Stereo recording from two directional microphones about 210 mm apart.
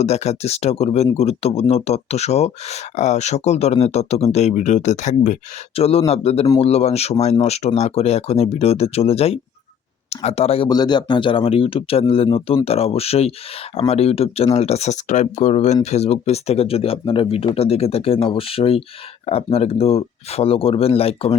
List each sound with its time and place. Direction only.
0.0 s speech: 30° left (ahead or behind)